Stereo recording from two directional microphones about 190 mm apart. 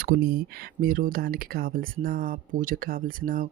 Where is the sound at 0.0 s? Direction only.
55° right (ahead or behind).